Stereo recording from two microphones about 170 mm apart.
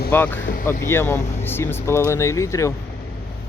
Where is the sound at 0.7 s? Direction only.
15° left (ahead or behind).